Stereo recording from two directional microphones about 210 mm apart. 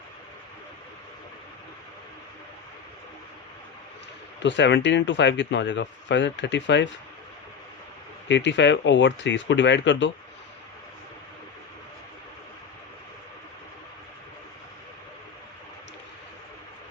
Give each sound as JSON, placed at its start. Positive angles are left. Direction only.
{"t": 4.4, "sound": "speech", "side_deg": 60}
{"t": 8.3, "sound": "speech", "side_deg": 55}